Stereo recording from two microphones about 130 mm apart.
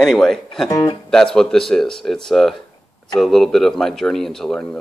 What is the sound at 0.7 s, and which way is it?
Speech, 25° left (ahead or behind).